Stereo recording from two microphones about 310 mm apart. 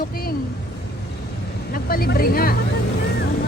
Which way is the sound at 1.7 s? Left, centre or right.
Left.